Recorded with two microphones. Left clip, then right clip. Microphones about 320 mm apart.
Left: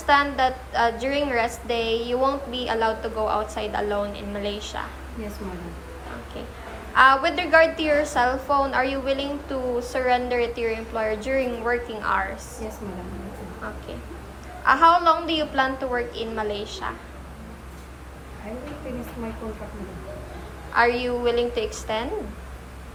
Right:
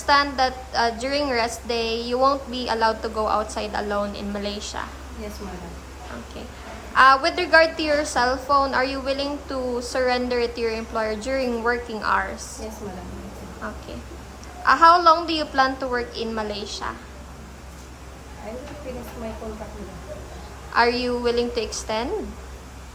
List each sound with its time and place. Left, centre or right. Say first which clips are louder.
0.0 s a woman's voice: even; centre
6.9 s a woman's voice: right 1 dB; centre
14.7 s a woman's voice: right 2 dB; centre
20.7 s a woman's voice: right 1 dB; centre